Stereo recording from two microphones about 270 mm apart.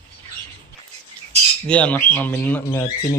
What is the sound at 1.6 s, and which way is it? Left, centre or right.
Speech, centre.